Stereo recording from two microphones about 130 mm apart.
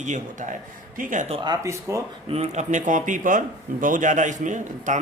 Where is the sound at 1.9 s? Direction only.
20° right (ahead or behind).